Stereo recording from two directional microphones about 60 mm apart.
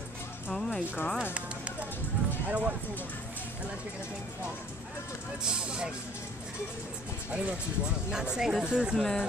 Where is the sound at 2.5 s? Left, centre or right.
Right.